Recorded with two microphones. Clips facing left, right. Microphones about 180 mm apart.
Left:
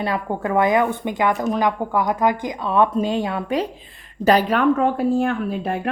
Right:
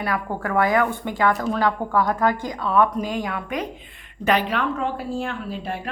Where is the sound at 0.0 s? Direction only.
25° left (ahead or behind).